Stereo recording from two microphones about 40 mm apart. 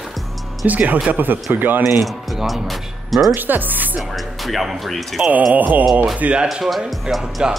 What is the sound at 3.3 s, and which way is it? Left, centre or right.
Speech, right.